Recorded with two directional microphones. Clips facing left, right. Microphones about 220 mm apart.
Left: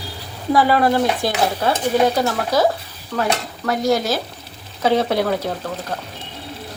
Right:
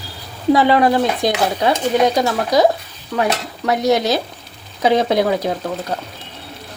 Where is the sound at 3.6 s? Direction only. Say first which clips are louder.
Right 3 dB; 20° right (ahead or behind).